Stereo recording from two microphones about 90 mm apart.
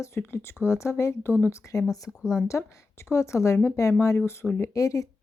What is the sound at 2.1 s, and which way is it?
Speech, 5° right (ahead or behind).